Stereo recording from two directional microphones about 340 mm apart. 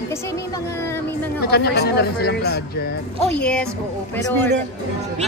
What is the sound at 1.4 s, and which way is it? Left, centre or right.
Speech, left.